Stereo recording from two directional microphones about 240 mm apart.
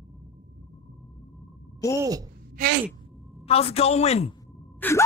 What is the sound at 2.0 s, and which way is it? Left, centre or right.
Speech, centre.